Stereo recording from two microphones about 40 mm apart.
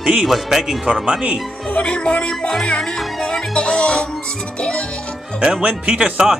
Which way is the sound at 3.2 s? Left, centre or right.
Left.